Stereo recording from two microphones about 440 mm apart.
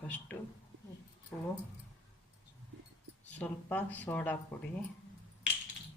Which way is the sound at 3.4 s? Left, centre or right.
Centre.